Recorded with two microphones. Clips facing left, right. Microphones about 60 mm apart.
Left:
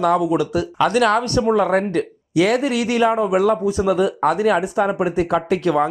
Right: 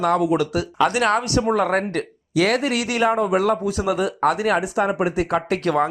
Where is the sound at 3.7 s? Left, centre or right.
Left.